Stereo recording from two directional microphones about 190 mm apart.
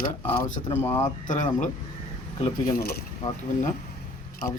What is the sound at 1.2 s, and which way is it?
Speech, 40° left (ahead or behind).